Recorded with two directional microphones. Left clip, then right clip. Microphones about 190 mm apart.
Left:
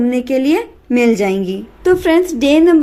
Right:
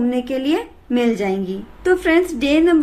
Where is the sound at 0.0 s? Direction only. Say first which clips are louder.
Left 5 dB; 35° left (ahead or behind).